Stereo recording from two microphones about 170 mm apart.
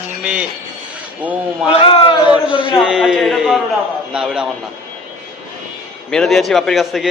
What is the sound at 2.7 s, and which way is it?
A man's voice, 5° right (ahead or behind).